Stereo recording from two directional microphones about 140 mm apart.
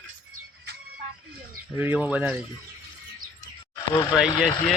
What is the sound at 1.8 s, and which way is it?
Speech, 10° right (ahead or behind).